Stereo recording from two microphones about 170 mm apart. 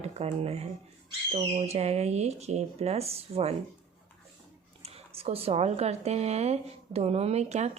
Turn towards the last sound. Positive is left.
turn(degrees=-40)  # may be behind; listen again after turning